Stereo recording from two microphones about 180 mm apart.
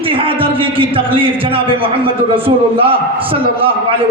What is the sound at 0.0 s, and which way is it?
A man's voice, 30° right (ahead or behind).